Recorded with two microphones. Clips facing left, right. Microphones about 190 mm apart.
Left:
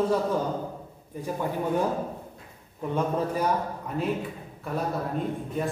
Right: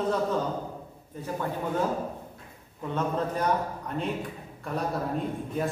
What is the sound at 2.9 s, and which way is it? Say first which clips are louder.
A man's voice: left 2 dB; 10° left (ahead or behind).